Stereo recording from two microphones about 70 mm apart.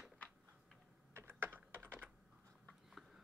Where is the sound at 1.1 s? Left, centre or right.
Right.